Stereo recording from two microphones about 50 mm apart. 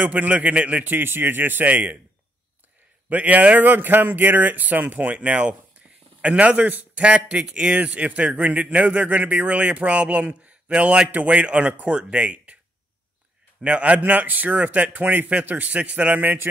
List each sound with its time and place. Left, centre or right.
0.0 s speech: right
0.9 s speech: right
3.1 s speech: right
13.6 s speech: right